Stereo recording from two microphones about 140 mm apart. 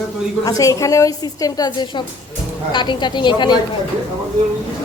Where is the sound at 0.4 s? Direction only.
25° left (ahead or behind).